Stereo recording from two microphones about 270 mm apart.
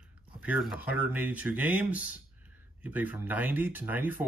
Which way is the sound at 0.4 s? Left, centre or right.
Centre.